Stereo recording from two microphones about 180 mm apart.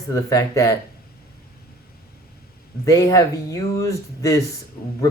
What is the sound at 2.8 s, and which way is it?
Speech, 15° left (ahead or behind).